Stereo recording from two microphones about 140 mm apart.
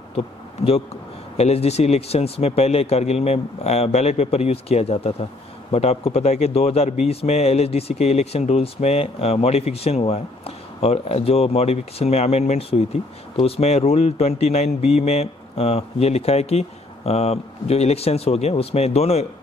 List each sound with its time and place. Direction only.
1.3 s a man's voice: 45° left (ahead or behind)